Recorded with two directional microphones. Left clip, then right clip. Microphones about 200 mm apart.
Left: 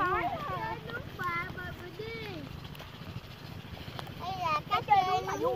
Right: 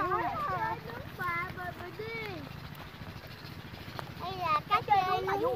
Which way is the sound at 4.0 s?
30° right (ahead or behind).